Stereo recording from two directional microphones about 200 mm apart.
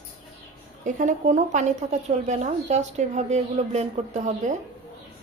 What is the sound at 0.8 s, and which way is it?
A woman's voice, 40° right (ahead or behind).